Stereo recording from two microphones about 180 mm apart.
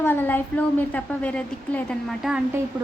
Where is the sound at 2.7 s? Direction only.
20° right (ahead or behind).